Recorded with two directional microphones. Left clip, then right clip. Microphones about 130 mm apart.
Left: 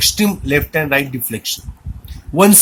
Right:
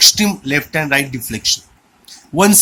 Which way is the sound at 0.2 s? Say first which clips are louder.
Left 1 dB; 15° left (ahead or behind).